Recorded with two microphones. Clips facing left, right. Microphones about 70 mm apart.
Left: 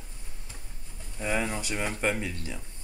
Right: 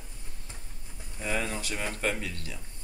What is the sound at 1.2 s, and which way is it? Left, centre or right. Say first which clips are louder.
Speech: left 2 dB; centre.